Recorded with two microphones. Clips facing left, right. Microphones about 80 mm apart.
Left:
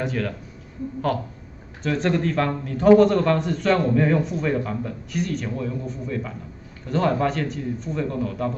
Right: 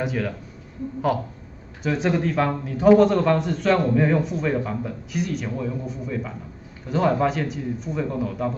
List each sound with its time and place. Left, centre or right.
0.0 s a man's voice: centre
1.8 s a man's voice: centre